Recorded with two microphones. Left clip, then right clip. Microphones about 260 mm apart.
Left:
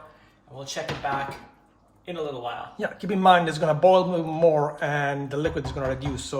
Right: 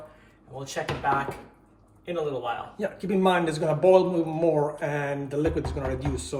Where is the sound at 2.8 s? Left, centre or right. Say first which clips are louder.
Left 2 dB; left.